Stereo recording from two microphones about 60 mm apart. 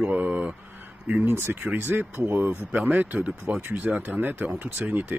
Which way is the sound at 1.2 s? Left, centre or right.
Right.